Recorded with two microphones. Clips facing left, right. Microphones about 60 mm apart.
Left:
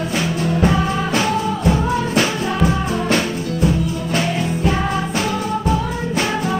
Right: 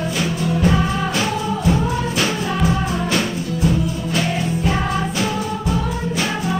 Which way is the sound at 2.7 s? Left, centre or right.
Left.